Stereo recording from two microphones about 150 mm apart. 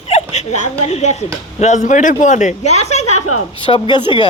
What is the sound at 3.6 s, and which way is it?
Speech, 35° left (ahead or behind).